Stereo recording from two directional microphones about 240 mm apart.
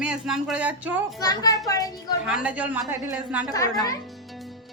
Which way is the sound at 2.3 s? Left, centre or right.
Centre.